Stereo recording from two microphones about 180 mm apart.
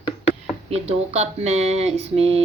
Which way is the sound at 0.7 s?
35° right (ahead or behind).